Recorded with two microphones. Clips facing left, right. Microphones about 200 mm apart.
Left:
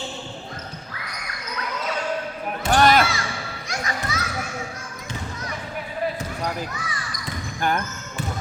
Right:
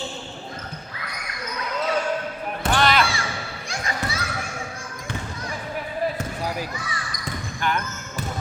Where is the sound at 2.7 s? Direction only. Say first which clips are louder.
Left 4 dB; 45° left (ahead or behind).